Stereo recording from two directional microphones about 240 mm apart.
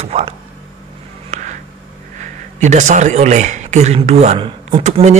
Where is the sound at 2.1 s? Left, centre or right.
Right.